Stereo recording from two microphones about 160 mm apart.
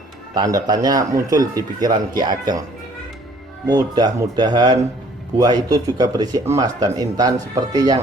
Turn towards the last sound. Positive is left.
turn(degrees=-25)  # may be behind; listen again after turning